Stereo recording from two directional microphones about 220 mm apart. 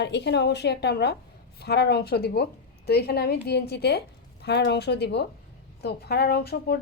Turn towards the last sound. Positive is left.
turn(degrees=45)  # may be behind; listen again after turning